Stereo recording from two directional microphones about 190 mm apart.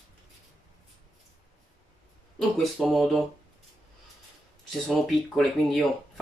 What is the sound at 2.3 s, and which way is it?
Speech, centre (ahead or behind).